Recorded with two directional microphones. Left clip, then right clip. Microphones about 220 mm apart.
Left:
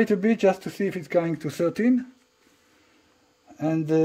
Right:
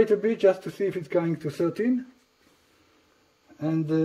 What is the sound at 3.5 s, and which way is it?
Speech, 50° left (ahead or behind).